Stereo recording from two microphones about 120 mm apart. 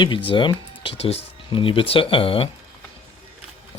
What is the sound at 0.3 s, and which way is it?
Speech, 45° left (ahead or behind).